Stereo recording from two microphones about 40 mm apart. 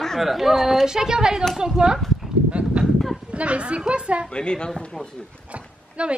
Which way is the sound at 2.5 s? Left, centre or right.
Right.